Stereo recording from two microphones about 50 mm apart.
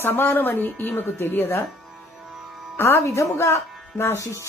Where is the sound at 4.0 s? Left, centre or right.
Left.